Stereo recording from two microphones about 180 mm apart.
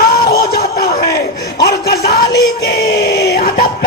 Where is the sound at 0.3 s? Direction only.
55° left (ahead or behind).